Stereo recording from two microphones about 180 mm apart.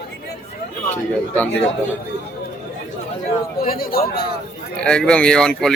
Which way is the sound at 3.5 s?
55° left (ahead or behind).